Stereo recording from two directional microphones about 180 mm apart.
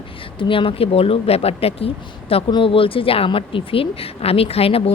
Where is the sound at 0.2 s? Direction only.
30° left (ahead or behind).